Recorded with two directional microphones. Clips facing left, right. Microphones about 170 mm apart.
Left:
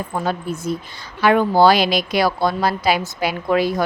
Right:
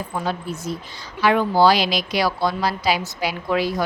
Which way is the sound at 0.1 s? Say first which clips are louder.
Left 3 dB; 50° left (ahead or behind).